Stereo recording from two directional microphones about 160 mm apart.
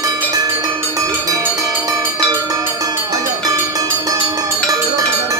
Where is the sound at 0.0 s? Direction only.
25° right (ahead or behind).